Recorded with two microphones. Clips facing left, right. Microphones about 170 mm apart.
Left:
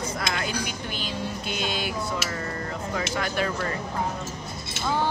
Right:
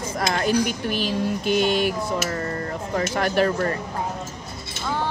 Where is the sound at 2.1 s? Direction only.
45° right (ahead or behind).